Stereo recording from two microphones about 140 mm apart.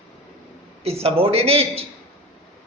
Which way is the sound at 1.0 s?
45° right (ahead or behind).